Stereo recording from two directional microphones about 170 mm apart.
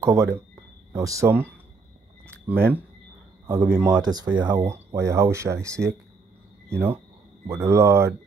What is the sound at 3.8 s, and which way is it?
Speech, 20° right (ahead or behind).